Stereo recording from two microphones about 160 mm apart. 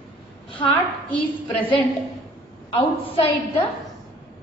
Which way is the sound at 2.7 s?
35° left (ahead or behind).